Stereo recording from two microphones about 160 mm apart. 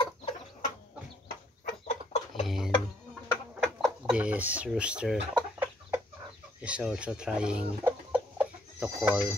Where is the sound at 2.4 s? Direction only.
5° right (ahead or behind).